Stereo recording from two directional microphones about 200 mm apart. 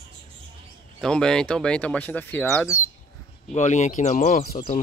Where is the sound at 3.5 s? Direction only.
35° left (ahead or behind).